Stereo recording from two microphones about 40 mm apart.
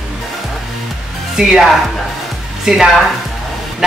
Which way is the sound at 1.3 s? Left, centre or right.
Centre.